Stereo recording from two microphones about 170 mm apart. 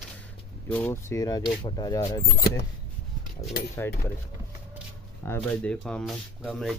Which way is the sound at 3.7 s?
15° left (ahead or behind).